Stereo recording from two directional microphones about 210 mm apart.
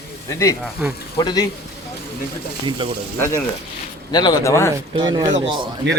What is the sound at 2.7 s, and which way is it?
Speech, 25° right (ahead or behind).